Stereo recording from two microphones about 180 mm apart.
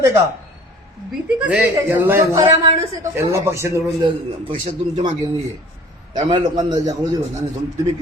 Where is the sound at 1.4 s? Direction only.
5° right (ahead or behind); by 6.9 s 20° right (ahead or behind).